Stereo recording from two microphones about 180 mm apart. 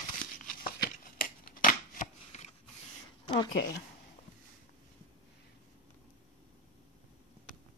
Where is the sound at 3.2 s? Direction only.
25° left (ahead or behind).